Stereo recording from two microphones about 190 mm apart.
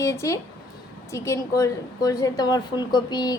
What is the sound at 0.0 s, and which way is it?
A woman's voice, 15° left (ahead or behind).